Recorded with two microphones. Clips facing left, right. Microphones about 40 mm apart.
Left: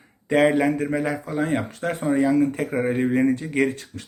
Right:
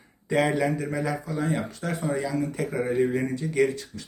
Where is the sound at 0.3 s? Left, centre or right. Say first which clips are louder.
Left 5 dB; left.